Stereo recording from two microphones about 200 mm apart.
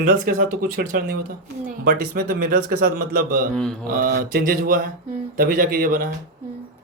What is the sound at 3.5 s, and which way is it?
Mantra, 5° left (ahead or behind).